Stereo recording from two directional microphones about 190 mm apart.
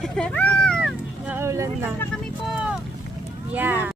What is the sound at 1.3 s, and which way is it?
Vehicle, 15° right (ahead or behind).